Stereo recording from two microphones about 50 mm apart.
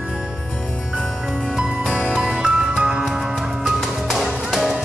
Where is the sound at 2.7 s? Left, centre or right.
Right.